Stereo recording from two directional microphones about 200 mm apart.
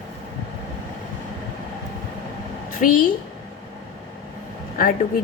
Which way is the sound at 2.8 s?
45° left (ahead or behind).